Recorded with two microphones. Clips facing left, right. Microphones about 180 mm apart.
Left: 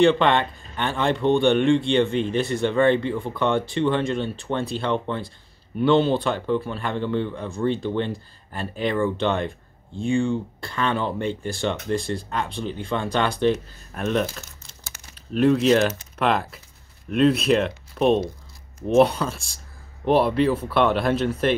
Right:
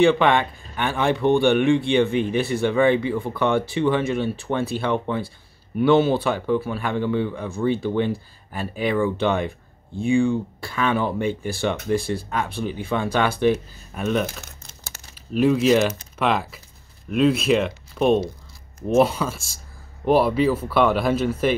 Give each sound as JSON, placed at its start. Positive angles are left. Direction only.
{"t": 0.0, "sound": "speech", "side_deg": -10}
{"t": 14.4, "sound": "crumpling", "side_deg": -45}
{"t": 15.3, "sound": "speech", "side_deg": -5}